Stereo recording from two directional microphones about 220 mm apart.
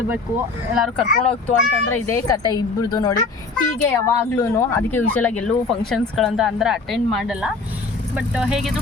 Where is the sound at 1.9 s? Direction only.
15° left (ahead or behind).